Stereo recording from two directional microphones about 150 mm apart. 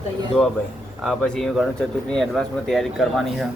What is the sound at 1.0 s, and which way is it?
Speech, 5° left (ahead or behind).